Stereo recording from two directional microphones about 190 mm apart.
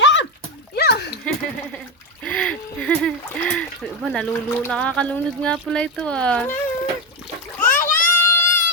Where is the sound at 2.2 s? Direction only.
5° left (ahead or behind).